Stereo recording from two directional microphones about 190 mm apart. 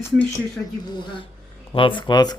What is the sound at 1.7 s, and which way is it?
Speech, 25° left (ahead or behind).